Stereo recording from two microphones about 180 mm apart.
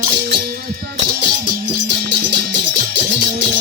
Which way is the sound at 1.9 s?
75° right (ahead or behind).